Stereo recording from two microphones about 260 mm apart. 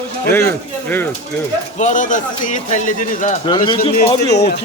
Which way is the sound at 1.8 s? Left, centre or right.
Left.